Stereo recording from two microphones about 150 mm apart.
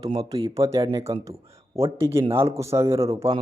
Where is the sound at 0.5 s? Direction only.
20° right (ahead or behind).